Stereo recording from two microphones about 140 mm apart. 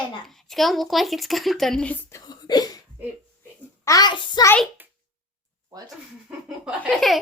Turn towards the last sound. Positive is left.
turn(degrees=0)  # may be behind; listen again after turning